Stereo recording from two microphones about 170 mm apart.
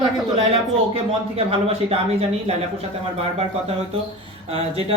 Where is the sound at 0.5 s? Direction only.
35° right (ahead or behind).